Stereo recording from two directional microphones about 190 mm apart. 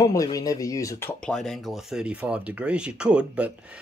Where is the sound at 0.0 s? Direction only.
20° left (ahead or behind).